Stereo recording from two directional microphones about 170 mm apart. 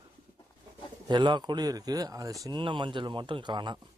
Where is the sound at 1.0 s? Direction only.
25° right (ahead or behind).